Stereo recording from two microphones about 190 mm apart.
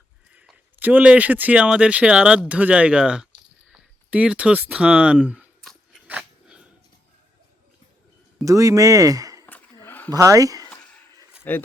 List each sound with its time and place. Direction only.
0.3 s speech: 10° right (ahead or behind)
3.7 s a sound: 5° right (ahead or behind)
8.4 s speech: 15° right (ahead or behind)
9.5 s a sound: 10° left (ahead or behind)
10.1 s speech: 15° right (ahead or behind)
11.5 s speech: 10° left (ahead or behind)